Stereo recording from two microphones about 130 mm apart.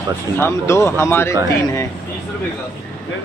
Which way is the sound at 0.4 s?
20° left (ahead or behind).